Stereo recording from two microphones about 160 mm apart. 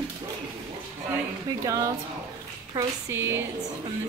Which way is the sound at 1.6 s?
20° right (ahead or behind).